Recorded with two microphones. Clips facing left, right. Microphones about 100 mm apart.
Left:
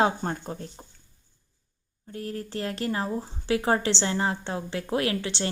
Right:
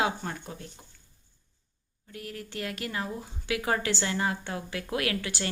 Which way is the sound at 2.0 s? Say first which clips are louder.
Left 6 dB; 35° left (ahead or behind).